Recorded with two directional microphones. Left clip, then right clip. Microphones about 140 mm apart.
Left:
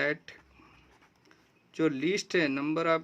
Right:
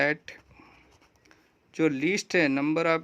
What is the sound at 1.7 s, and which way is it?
Speech, 35° right (ahead or behind).